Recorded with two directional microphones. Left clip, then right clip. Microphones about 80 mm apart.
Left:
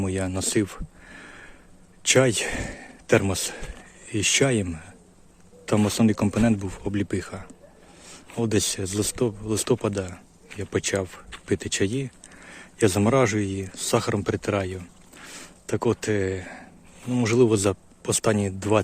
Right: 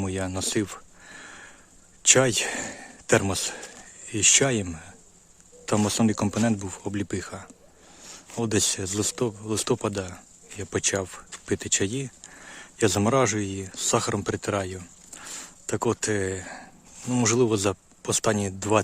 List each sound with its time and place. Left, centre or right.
0.0 s a sound: right
2.0 s speech: right
17.1 s speech: right
17.4 s speech: right